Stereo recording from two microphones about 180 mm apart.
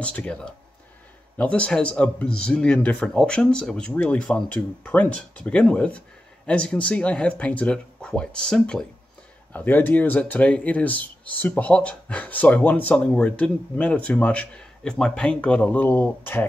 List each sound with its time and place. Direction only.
0.0 s speech: 5° left (ahead or behind)